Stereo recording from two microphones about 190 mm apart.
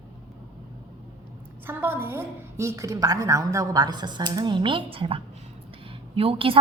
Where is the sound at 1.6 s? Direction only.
10° right (ahead or behind).